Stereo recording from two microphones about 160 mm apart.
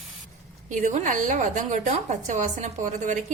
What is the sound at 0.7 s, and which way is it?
A woman's voice, 50° right (ahead or behind).